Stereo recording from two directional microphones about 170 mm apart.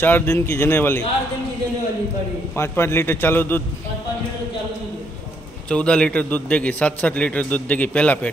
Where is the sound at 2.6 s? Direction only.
15° left (ahead or behind).